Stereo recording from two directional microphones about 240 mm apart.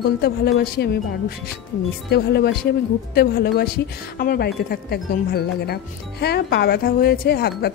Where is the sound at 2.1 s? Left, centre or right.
Left.